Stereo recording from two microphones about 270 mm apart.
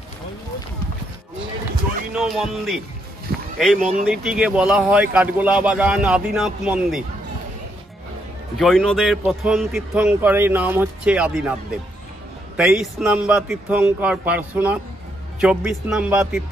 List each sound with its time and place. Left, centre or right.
2.1 s a man's voice: centre
8.5 s a man's voice: centre
12.5 s a man's voice: centre